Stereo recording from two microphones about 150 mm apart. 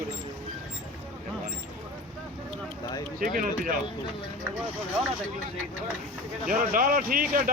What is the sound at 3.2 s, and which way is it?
Speech, 70° right (ahead or behind).